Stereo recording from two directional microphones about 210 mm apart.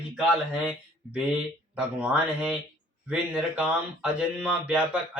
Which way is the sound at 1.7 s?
5° right (ahead or behind).